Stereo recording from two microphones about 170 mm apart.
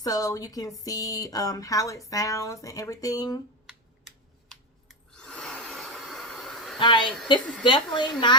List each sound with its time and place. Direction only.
0.0 s speech: 20° left (ahead or behind)
4.4 s a sound: 5° left (ahead or behind)
6.7 s speech: 30° left (ahead or behind)